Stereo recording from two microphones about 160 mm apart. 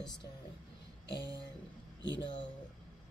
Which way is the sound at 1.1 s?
90° left.